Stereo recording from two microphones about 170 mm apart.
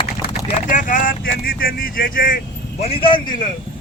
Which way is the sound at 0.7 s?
50° left (ahead or behind).